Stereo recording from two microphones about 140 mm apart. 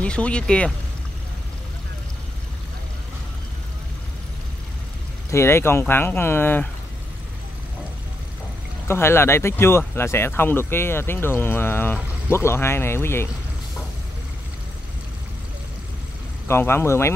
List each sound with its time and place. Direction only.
0.0 s speech: 10° left (ahead or behind)
5.3 s speech: 20° left (ahead or behind)
8.8 s speech: 15° left (ahead or behind)
16.4 s speech: 15° left (ahead or behind)